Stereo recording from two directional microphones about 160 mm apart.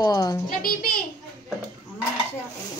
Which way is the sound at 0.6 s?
65° left (ahead or behind).